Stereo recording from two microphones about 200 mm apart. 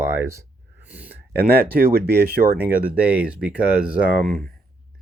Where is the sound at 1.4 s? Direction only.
50° right (ahead or behind).